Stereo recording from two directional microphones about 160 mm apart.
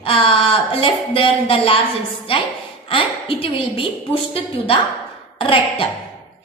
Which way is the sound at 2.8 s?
35° left (ahead or behind).